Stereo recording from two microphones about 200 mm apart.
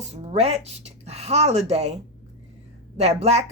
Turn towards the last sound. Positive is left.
turn(degrees=-35)  # may be behind; listen again after turning